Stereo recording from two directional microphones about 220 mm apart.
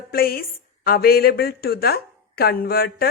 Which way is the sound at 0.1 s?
40° left (ahead or behind).